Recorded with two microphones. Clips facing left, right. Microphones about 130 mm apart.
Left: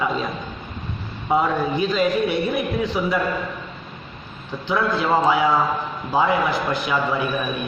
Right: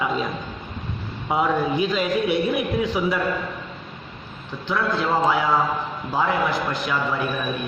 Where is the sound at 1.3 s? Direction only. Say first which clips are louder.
Left 1 dB; 5° right (ahead or behind).